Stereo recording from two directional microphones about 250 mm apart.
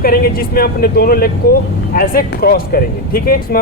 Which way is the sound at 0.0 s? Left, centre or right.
Left.